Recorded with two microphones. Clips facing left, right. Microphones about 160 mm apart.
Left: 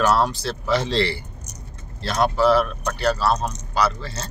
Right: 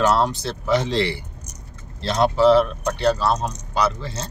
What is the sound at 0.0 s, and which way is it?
Speech, 20° right (ahead or behind).